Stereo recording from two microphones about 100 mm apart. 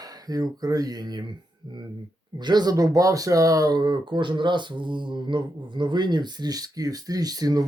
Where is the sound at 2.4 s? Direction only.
45° right (ahead or behind).